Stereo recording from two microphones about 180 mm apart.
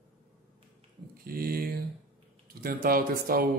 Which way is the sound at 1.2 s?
55° right (ahead or behind).